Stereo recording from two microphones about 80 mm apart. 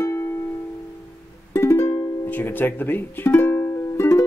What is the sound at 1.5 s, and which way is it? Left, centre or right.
Music, left.